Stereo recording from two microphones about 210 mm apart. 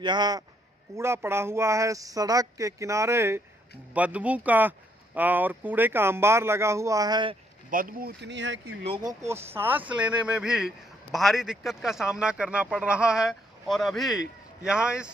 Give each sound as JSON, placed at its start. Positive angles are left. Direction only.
{"t": 0.0, "sound": "a man's voice", "side_deg": -20}
{"t": 7.7, "sound": "speech", "side_deg": -45}
{"t": 8.8, "sound": "a man's voice", "side_deg": -25}
{"t": 9.2, "sound": "speech", "side_deg": -10}